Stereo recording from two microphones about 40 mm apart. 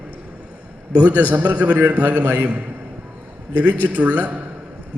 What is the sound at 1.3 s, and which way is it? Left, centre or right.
A man's voice, right.